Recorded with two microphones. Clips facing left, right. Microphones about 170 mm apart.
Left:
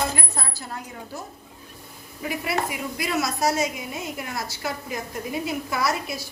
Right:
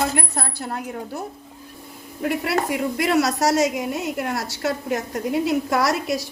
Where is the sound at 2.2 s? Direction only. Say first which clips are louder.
Right 5 dB; 70° right (ahead or behind).